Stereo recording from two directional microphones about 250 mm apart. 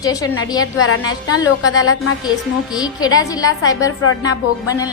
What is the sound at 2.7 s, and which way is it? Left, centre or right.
A woman's voice, centre.